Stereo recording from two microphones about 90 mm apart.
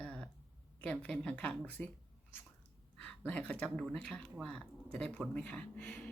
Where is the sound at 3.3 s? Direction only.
15° left (ahead or behind).